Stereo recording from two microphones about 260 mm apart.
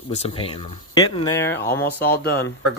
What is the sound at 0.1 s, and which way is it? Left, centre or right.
Speech, left.